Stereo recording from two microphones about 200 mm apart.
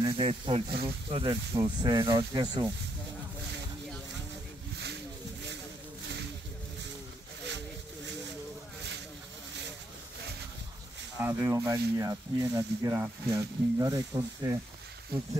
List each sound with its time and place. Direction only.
0.0 s speech: 25° right (ahead or behind)
7.4 s a sound: 60° right (ahead or behind)
11.1 s speech: 10° right (ahead or behind)